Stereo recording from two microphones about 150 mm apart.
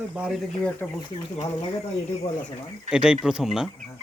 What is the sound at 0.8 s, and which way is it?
Speech, 5° left (ahead or behind).